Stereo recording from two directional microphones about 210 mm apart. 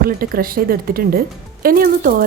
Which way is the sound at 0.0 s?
45° right (ahead or behind).